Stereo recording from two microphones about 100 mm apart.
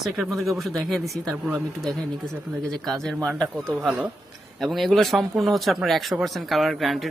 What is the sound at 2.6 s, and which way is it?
Speech, 5° left (ahead or behind).